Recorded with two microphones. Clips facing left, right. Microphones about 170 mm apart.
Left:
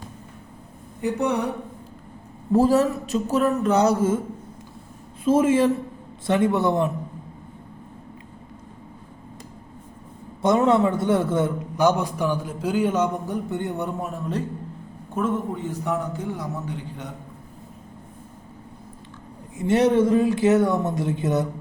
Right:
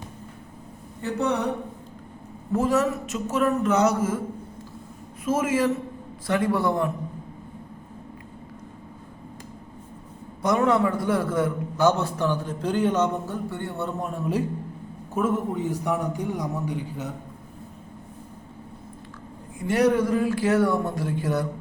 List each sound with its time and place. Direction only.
1.0 s a man's voice: 10° left (ahead or behind)
2.5 s speech: 30° left (ahead or behind)
5.2 s speech: 30° left (ahead or behind)
10.4 s a man's voice: 25° left (ahead or behind)
14.0 s a man's voice: centre (ahead or behind)
19.5 s speech: 25° left (ahead or behind)